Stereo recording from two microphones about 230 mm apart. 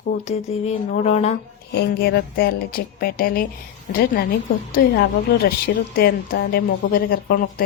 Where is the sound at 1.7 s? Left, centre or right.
Left.